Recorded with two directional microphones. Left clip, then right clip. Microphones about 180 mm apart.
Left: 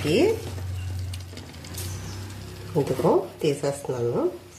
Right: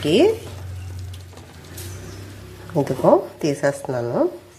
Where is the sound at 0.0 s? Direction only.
35° right (ahead or behind).